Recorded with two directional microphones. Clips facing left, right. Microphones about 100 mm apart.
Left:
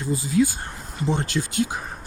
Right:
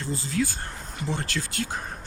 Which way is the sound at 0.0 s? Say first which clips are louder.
Left 6 dB; 15° left (ahead or behind).